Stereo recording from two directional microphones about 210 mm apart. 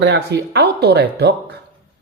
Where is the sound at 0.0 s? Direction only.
55° right (ahead or behind).